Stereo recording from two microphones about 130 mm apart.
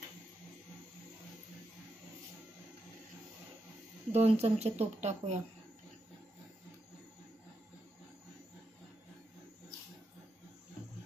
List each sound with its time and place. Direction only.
4.1 s speech: 50° right (ahead or behind)